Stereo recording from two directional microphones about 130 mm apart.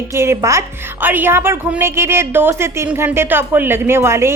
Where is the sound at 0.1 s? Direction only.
20° right (ahead or behind).